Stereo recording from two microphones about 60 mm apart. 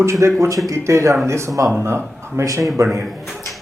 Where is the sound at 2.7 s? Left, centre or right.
Right.